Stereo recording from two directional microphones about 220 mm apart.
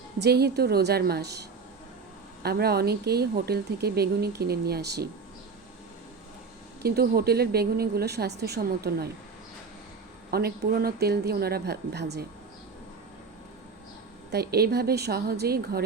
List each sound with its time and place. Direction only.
0.2 s speech: 45° right (ahead or behind)
6.8 s speech: 45° right (ahead or behind)
10.3 s speech: 45° right (ahead or behind)
14.3 s speech: 45° right (ahead or behind)